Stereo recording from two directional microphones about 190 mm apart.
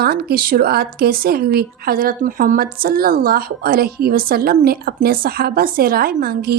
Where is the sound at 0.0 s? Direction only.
55° right (ahead or behind).